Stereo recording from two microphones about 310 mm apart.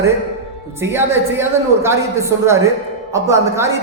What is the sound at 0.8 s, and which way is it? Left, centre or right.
A woman's voice, centre.